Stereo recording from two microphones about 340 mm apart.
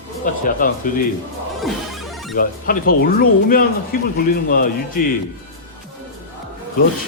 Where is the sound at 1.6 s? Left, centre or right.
Centre.